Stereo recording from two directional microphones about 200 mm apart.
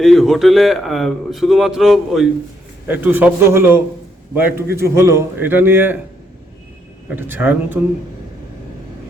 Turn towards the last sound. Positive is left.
turn(degrees=-10)  # may be behind; listen again after turning